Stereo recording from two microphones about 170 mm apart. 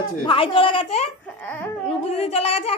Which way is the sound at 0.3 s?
30° left (ahead or behind).